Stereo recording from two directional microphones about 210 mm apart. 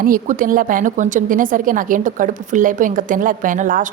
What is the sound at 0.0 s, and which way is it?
A woman's voice, 40° right (ahead or behind).